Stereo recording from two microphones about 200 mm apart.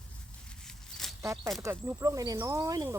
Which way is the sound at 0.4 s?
5° left (ahead or behind).